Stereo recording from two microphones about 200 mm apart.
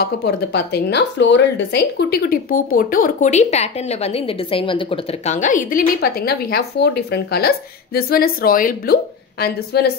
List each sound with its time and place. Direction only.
0.0 s speech: 55° left (ahead or behind); by 5.3 s 25° left (ahead or behind)
5.3 s speech: 40° left (ahead or behind)